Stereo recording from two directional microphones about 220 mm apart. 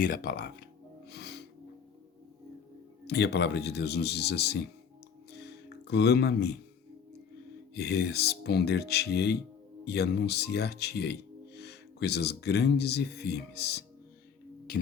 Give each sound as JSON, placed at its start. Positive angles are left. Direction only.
{"t": 0.0, "sound": "music", "side_deg": 40}
{"t": 3.1, "sound": "speech", "side_deg": 50}
{"t": 5.4, "sound": "music", "side_deg": 50}
{"t": 7.7, "sound": "speech", "side_deg": 50}